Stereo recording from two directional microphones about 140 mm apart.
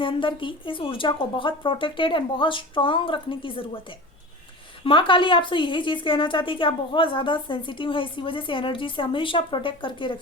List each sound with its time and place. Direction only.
0.0 s a woman's voice: 35° left (ahead or behind)
4.8 s a woman's voice: 40° left (ahead or behind)